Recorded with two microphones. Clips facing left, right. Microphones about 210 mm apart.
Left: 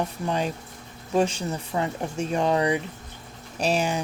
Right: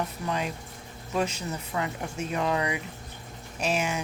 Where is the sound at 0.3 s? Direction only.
30° left (ahead or behind).